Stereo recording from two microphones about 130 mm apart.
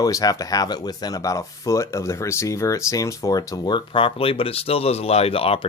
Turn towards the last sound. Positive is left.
turn(degrees=45)  # may be behind; listen again after turning